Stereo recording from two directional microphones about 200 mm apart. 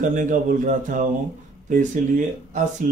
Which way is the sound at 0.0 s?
40° right (ahead or behind).